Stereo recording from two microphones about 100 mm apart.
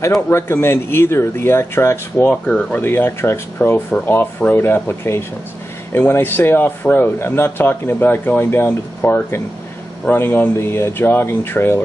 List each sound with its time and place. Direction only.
0.3 s speech: 25° left (ahead or behind)
2.4 s speech: 10° left (ahead or behind)